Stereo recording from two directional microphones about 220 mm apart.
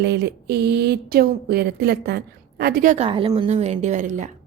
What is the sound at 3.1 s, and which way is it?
Speech, 25° right (ahead or behind).